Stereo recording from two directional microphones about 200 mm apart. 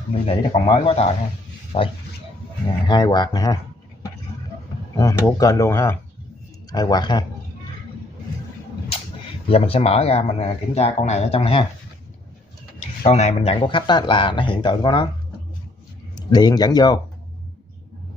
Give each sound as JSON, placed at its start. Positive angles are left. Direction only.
{"t": 0.1, "sound": "speech", "side_deg": 30}
{"t": 4.9, "sound": "speech", "side_deg": 15}
{"t": 9.5, "sound": "speech", "side_deg": 30}
{"t": 12.7, "sound": "speech", "side_deg": 30}
{"t": 16.2, "sound": "speech", "side_deg": 20}